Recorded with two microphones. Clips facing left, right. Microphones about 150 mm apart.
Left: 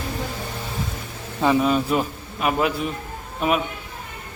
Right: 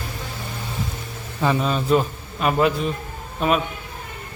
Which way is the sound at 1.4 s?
10° left (ahead or behind).